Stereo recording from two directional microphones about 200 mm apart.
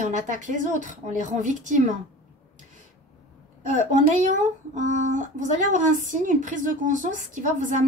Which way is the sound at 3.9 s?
40° right (ahead or behind).